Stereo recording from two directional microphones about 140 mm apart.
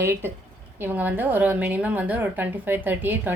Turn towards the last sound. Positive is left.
turn(degrees=-15)  # may be behind; listen again after turning